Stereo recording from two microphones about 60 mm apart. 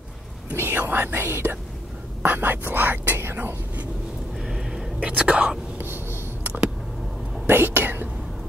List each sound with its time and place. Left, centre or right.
0.6 s speech: right
2.2 s whispering: right
4.4 s whispering: centre
5.8 s a sound: right
7.4 s speech: right